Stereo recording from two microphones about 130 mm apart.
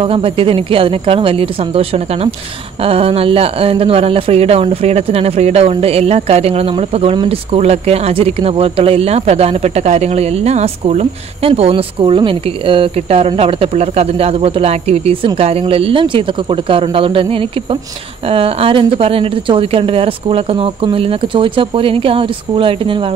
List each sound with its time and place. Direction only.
0.0 s speech: 45° right (ahead or behind)